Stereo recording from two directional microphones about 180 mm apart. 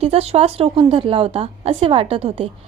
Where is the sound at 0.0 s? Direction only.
35° right (ahead or behind).